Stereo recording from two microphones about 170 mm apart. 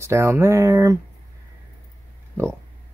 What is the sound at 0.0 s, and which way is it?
Speech, 15° right (ahead or behind).